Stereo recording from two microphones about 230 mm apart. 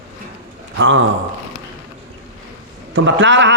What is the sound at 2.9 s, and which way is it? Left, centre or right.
Speech, right.